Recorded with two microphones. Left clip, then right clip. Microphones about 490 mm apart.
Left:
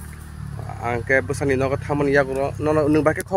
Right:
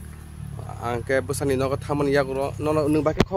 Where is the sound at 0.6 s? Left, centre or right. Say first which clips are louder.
Left 3 dB; right.